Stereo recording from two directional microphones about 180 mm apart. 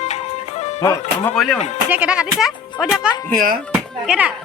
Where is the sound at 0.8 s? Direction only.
20° left (ahead or behind).